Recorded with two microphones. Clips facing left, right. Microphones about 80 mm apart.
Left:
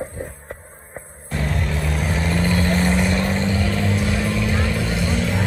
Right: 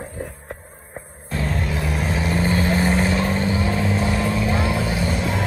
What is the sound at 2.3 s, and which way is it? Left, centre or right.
Vehicle, centre.